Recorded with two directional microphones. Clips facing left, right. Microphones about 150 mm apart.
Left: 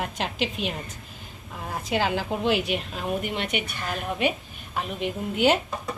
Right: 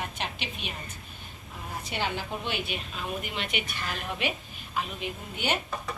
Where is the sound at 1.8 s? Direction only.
90° left.